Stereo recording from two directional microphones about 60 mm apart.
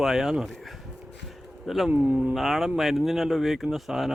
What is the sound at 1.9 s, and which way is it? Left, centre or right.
Speech, right.